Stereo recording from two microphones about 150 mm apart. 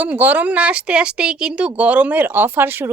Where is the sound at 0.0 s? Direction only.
10° right (ahead or behind).